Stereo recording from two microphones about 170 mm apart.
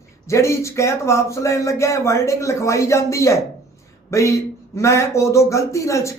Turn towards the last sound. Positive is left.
turn(degrees=15)  # may be behind; listen again after turning